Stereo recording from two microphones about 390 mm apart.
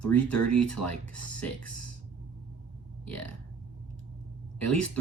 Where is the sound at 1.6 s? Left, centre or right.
Left.